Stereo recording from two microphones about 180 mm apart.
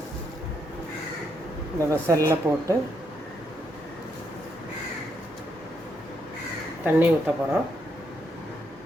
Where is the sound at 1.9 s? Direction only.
15° right (ahead or behind).